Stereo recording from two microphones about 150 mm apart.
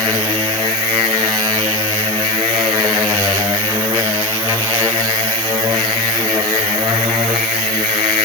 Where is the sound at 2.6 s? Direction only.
25° right (ahead or behind).